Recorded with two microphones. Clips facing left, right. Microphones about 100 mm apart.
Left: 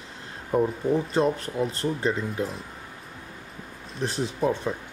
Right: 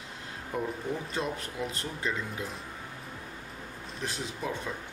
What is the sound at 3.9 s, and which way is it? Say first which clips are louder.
Speech: left 9 dB; 30° left (ahead or behind).